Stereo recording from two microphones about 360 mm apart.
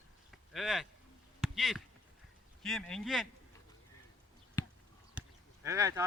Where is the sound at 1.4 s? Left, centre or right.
Centre.